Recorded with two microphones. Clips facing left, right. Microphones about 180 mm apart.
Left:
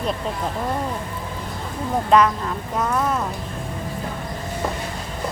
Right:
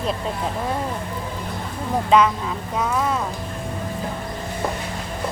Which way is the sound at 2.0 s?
Centre (ahead or behind).